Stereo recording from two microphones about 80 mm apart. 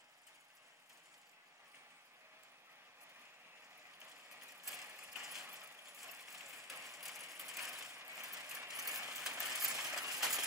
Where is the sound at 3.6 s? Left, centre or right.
Right.